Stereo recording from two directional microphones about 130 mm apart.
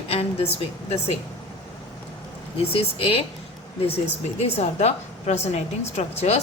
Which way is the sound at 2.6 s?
45° left (ahead or behind).